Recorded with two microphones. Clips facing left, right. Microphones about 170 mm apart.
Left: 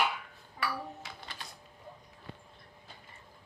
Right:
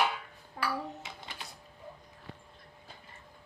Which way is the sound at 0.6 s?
70° right (ahead or behind).